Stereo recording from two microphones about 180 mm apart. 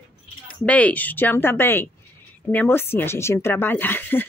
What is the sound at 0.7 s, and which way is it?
A woman's voice, 10° left (ahead or behind).